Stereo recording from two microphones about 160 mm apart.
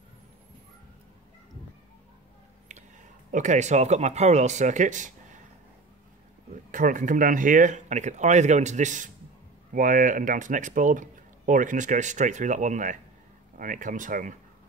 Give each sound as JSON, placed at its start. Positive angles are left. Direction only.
{"t": 3.3, "sound": "speech", "side_deg": -50}
{"t": 6.5, "sound": "speech", "side_deg": -55}